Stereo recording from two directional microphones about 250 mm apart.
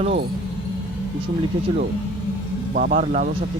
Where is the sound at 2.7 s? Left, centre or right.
Right.